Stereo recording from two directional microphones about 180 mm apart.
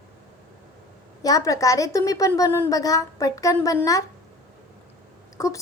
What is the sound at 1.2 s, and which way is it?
A woman's voice, 20° left (ahead or behind).